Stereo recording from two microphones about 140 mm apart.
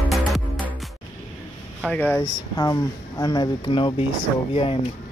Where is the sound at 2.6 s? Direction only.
25° left (ahead or behind).